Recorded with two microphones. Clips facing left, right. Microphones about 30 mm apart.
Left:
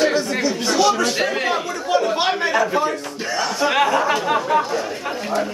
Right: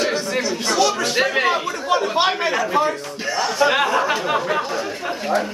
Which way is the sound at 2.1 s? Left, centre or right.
Centre.